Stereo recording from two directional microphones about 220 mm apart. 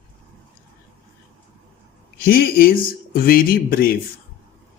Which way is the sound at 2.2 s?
45° left (ahead or behind).